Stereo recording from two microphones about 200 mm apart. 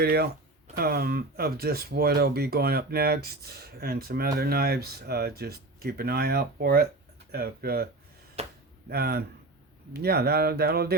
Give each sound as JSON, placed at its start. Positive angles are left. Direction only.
{"t": 0.0, "sound": "speech", "side_deg": -50}
{"t": 8.4, "sound": "a sound", "side_deg": -30}
{"t": 8.9, "sound": "speech", "side_deg": -50}